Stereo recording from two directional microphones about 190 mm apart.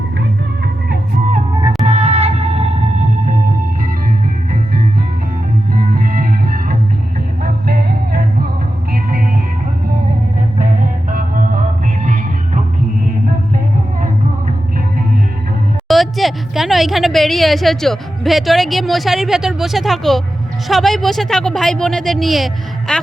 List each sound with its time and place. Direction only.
1.6 s music: 35° right (ahead or behind)
5.7 s music: 50° right (ahead or behind)
11.1 s music: 45° right (ahead or behind)
15.9 s a woman's voice: centre (ahead or behind)